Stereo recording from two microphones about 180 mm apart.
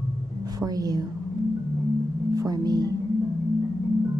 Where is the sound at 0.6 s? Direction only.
20° right (ahead or behind).